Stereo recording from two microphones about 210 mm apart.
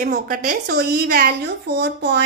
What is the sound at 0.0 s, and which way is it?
A woman's voice, 40° right (ahead or behind).